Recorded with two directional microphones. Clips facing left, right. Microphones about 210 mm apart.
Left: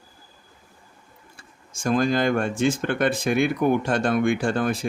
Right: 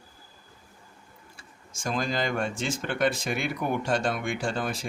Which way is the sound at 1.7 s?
55° left (ahead or behind).